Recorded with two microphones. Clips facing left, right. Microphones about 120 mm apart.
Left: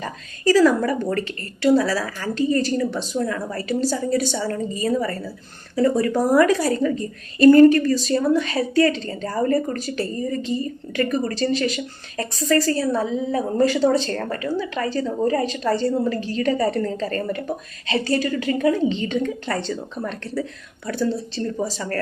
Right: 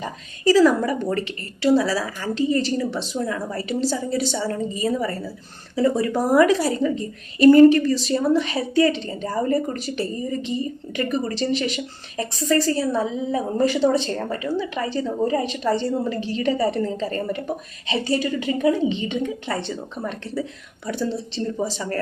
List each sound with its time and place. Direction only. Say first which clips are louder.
0.0 s a woman's voice: even; 20° right (ahead or behind)